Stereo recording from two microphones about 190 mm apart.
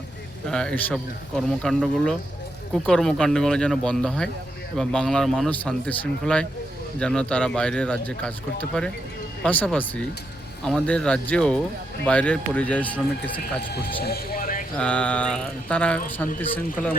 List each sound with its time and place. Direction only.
0.4 s speech: 5° left (ahead or behind)
9.4 s a man's voice: 5° left (ahead or behind)
14.0 s a sound: 55° left (ahead or behind)
14.8 s a man's voice: 5° left (ahead or behind)